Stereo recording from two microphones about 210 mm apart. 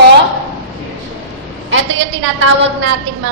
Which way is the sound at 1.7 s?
65° right (ahead or behind).